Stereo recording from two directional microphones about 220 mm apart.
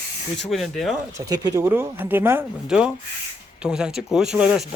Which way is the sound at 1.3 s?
15° right (ahead or behind).